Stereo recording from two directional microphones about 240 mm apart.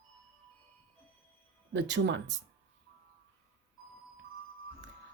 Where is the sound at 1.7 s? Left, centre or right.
Right.